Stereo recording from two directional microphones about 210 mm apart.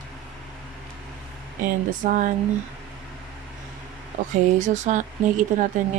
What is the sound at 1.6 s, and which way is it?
Speech, 40° right (ahead or behind).